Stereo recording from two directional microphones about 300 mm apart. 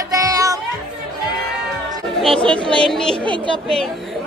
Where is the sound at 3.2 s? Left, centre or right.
Centre.